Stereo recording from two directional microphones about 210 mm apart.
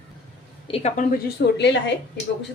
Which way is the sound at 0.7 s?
30° left (ahead or behind).